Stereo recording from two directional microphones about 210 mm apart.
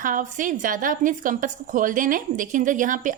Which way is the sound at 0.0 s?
40° right (ahead or behind).